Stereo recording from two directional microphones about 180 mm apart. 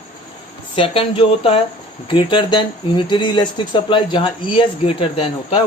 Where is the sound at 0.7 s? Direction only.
30° left (ahead or behind).